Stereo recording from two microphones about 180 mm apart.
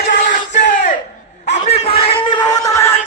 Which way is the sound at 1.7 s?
35° left (ahead or behind).